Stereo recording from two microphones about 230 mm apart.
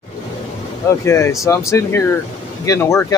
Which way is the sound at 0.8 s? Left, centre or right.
Centre.